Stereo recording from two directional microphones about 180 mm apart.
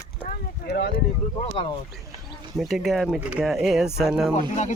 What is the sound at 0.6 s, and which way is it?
Speech, 60° left (ahead or behind).